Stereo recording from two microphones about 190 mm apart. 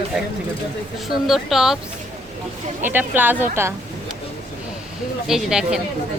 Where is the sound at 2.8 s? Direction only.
10° right (ahead or behind).